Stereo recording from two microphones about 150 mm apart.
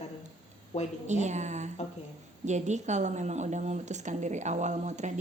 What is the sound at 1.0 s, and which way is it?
A woman's voice, 50° right (ahead or behind).